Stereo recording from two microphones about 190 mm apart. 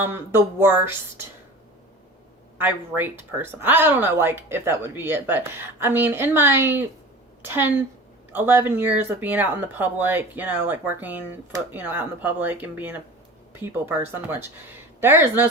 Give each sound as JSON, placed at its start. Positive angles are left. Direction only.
{"t": 0.0, "sound": "speech", "side_deg": -10}
{"t": 2.6, "sound": "a woman's voice", "side_deg": -10}